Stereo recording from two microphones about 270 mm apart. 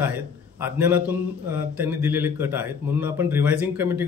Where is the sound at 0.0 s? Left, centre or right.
Centre.